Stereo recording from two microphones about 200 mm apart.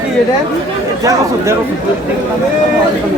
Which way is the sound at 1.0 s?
15° right (ahead or behind).